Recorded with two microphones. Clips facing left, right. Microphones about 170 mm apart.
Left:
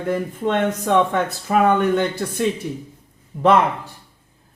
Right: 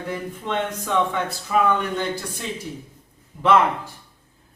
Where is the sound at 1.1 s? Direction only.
50° left (ahead or behind).